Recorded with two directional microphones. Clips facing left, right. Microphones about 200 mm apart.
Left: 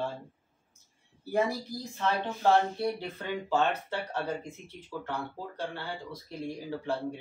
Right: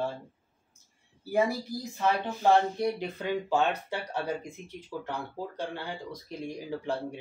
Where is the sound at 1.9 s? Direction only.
15° right (ahead or behind).